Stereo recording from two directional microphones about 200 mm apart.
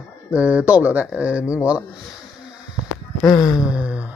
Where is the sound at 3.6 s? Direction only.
5° right (ahead or behind).